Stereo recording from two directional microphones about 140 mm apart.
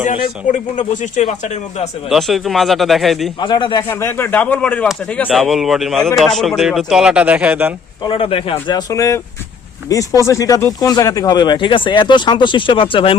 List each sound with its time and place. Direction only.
0.0 s speech: 60° left (ahead or behind)
2.0 s a man's voice: centre (ahead or behind)
3.4 s speech: 35° left (ahead or behind)
3.8 s speech: 15° left (ahead or behind)
5.3 s a man's voice: centre (ahead or behind)
8.0 s speech: 40° left (ahead or behind)
8.6 s speech: 25° left (ahead or behind)